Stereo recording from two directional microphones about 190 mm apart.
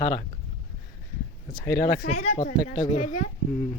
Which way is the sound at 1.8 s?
45° left (ahead or behind).